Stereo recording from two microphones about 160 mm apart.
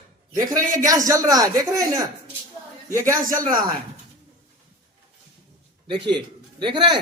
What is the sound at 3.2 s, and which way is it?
Speech, 60° right (ahead or behind).